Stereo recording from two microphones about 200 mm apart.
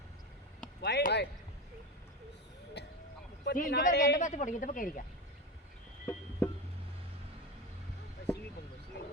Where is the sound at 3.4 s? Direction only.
45° left (ahead or behind).